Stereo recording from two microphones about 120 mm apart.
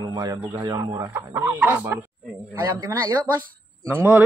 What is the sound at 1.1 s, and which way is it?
Speech, 20° right (ahead or behind).